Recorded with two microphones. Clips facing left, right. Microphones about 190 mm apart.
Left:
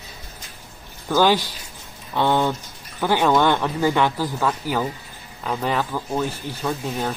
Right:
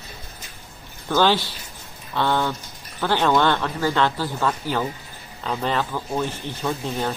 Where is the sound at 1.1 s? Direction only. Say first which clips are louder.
Left 1 dB; 10° left (ahead or behind).